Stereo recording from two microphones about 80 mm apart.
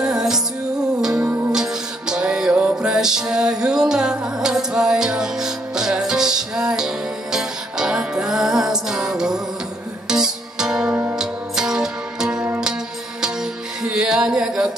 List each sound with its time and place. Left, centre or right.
0.0 s music: centre
1.2 s music: right
1.5 s music: centre